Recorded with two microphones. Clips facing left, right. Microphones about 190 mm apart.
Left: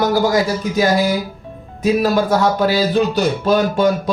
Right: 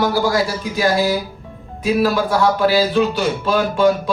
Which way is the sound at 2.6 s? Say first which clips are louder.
Even; 40° left (ahead or behind).